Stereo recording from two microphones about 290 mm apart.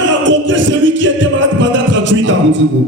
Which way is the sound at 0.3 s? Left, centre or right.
Right.